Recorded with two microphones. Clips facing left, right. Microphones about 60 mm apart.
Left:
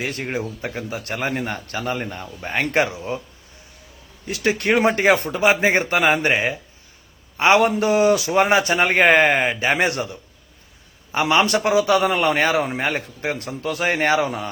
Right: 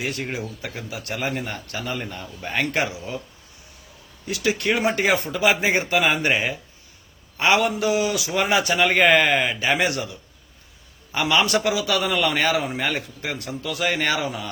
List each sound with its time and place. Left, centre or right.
0.0 s a man's voice: left
4.3 s a man's voice: left